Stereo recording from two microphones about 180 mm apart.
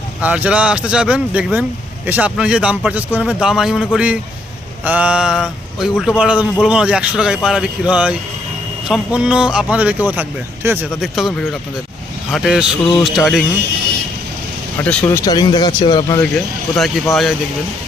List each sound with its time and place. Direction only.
0.2 s speech: 10° right (ahead or behind)
11.0 s speech: centre (ahead or behind)
14.8 s speech: 10° left (ahead or behind)
15.2 s speech: 20° left (ahead or behind)
16.7 s speech: centre (ahead or behind)